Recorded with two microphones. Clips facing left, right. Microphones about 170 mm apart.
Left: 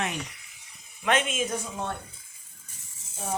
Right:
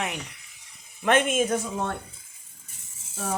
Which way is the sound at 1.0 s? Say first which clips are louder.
Right 5 dB; 50° right (ahead or behind).